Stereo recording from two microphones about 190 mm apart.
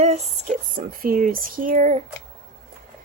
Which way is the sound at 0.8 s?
50° right (ahead or behind).